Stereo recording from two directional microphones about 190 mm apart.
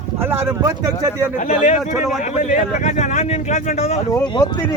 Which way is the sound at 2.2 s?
40° left (ahead or behind).